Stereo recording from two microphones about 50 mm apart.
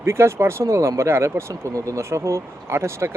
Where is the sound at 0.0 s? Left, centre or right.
Right.